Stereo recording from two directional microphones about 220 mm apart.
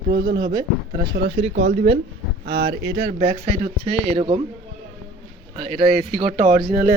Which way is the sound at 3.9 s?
20° left (ahead or behind).